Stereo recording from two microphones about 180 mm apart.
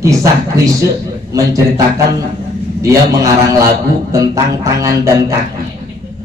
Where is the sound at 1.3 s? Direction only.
20° right (ahead or behind).